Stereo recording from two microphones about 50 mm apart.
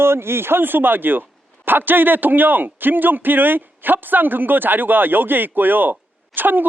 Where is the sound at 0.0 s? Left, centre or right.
Right.